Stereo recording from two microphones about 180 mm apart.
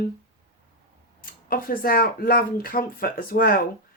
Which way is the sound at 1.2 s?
55° left (ahead or behind).